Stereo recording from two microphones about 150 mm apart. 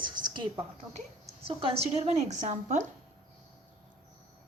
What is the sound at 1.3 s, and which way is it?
A woman's voice, 35° right (ahead or behind).